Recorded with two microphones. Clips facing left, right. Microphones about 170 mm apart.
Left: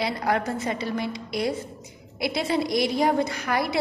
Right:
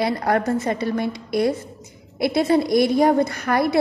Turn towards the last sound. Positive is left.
turn(degrees=-50)  # may be behind; listen again after turning